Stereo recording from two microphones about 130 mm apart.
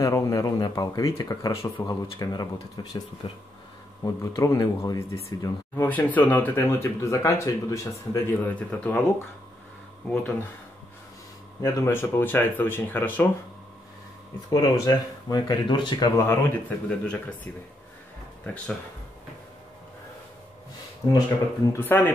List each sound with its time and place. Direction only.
0.0 s speech: 25° left (ahead or behind)
4.0 s speech: 20° left (ahead or behind)
8.5 s speech: 10° left (ahead or behind)
11.6 s speech: 20° left (ahead or behind)
14.5 s speech: 30° left (ahead or behind)
16.3 s speech: 10° left (ahead or behind)
18.4 s speech: 10° left (ahead or behind)
21.7 s speech: 15° left (ahead or behind)